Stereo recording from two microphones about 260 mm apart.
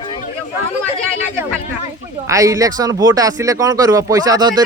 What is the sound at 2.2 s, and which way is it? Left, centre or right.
Speech, centre.